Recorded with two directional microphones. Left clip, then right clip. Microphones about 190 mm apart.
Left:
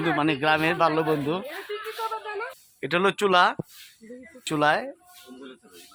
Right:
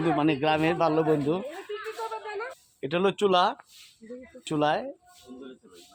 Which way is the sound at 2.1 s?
15° left (ahead or behind).